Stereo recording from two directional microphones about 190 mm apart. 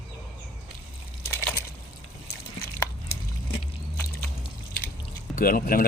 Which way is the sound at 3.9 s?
10° left (ahead or behind).